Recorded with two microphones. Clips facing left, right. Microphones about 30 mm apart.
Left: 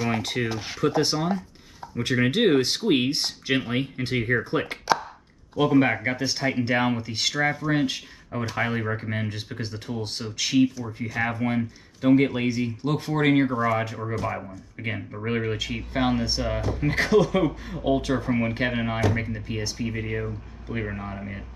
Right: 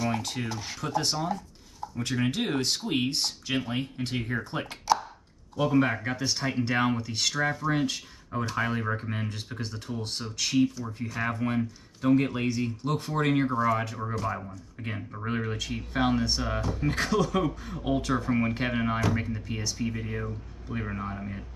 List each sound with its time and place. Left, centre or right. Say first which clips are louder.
0.0 s speech: left 4 dB; left
20.9 s speech: even; centre
21.2 s speech: left 2 dB; left